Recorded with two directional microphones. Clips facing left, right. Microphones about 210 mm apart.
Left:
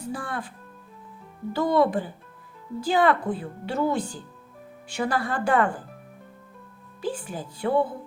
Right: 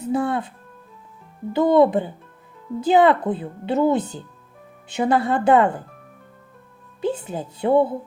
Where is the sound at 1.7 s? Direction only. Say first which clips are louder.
Right 6 dB; 20° right (ahead or behind).